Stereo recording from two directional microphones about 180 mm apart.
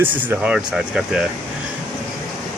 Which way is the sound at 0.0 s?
10° right (ahead or behind).